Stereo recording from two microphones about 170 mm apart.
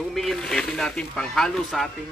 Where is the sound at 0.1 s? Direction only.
Centre (ahead or behind).